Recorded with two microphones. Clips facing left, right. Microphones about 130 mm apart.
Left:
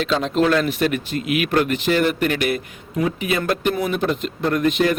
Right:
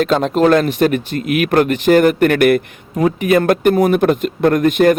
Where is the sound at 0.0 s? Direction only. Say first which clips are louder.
Right 6 dB; 50° right (ahead or behind).